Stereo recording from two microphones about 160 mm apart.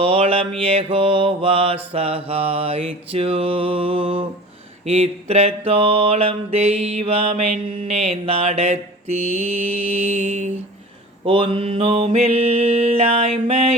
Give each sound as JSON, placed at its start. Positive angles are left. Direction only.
{"t": 0.0, "sound": "mantra", "side_deg": -35}